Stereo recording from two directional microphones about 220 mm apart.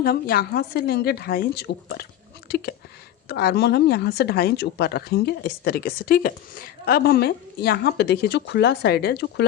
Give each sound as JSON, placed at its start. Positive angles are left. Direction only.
{"t": 0.0, "sound": "speech", "side_deg": 45}
{"t": 2.5, "sound": "a sound", "side_deg": 45}
{"t": 3.2, "sound": "speech", "side_deg": 45}